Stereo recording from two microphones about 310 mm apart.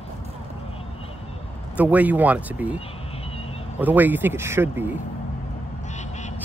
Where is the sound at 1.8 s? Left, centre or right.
Centre.